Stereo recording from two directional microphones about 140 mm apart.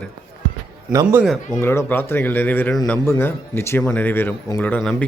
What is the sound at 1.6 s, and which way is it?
Speech, 20° left (ahead or behind).